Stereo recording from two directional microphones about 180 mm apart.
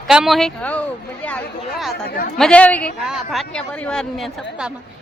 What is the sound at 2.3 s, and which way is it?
A woman's voice, 5° left (ahead or behind).